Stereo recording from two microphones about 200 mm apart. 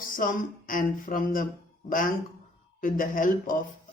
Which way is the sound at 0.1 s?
40° left (ahead or behind).